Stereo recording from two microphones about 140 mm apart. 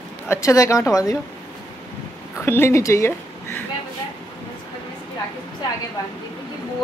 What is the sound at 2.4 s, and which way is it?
A woman's voice, 15° left (ahead or behind).